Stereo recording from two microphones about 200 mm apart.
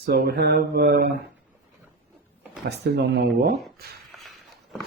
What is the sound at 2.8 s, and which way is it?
Speech, 55° right (ahead or behind).